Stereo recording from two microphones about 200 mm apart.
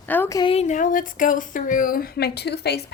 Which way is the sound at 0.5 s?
35° left (ahead or behind).